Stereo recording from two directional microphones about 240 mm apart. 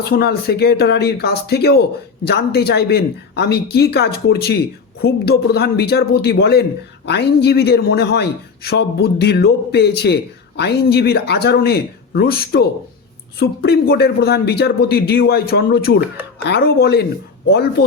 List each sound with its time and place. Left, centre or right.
0.1 s a man's voice: left